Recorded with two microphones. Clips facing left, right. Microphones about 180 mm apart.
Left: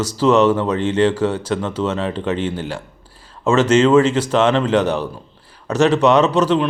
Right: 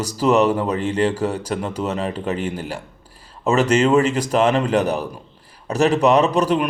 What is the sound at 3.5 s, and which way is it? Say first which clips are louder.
Speech: left 3 dB; 35° right (ahead or behind).